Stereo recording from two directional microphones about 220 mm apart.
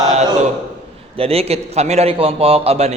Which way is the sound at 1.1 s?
25° right (ahead or behind).